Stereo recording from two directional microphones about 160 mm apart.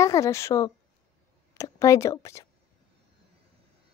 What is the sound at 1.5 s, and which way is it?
Speech, 20° left (ahead or behind).